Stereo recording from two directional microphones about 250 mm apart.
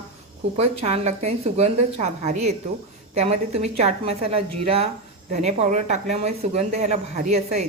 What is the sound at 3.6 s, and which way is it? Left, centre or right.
A woman's voice, right.